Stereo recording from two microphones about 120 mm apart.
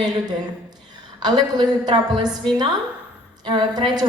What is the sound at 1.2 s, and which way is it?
A woman's voice, 35° right (ahead or behind).